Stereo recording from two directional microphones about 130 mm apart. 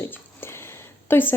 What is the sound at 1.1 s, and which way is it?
Speech, 15° left (ahead or behind).